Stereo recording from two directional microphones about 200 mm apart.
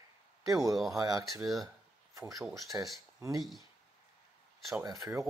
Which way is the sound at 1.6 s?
15° right (ahead or behind).